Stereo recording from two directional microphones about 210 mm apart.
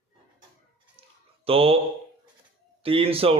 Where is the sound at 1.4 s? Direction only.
25° right (ahead or behind).